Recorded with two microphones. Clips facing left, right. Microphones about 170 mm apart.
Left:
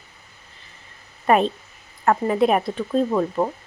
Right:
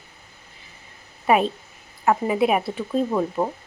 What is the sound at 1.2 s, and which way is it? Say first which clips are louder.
A woman's voice: left 1 dB; 5° right (ahead or behind).